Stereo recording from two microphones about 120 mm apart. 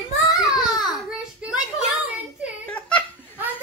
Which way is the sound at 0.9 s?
5° right (ahead or behind).